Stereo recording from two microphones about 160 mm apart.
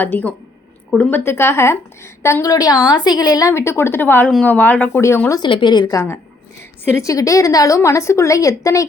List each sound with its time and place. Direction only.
0.0 s a woman's voice: 10° left (ahead or behind)
5.4 s a woman's voice: 30° left (ahead or behind)